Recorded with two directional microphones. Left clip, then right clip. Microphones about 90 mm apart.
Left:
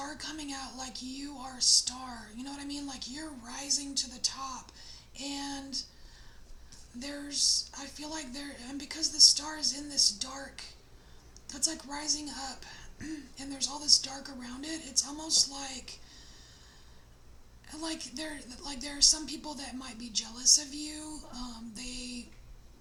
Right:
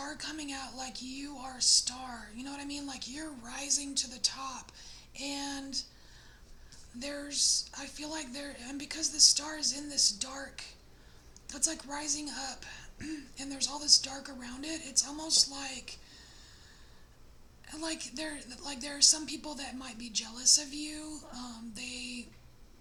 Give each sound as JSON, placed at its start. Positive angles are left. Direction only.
{"t": 0.0, "sound": "a woman's voice", "side_deg": -35}
{"t": 7.0, "sound": "a woman's voice", "side_deg": -35}
{"t": 17.7, "sound": "a woman's voice", "side_deg": -35}
{"t": 20.0, "sound": "a sound", "side_deg": -30}